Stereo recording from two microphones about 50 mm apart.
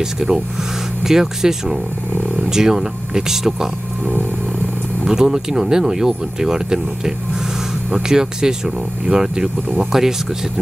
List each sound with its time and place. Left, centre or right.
1.0 s speech: centre
5.0 s speech: centre